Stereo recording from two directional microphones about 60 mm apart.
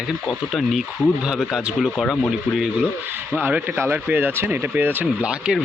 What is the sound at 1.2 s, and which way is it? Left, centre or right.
Speech, centre.